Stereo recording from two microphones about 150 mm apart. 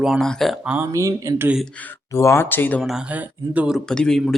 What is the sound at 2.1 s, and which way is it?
Speech, 20° left (ahead or behind).